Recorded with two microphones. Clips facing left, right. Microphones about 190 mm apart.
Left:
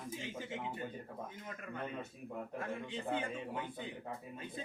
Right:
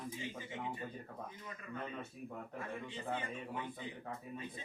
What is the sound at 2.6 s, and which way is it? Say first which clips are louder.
Speech: left 2 dB; 75° left (ahead or behind).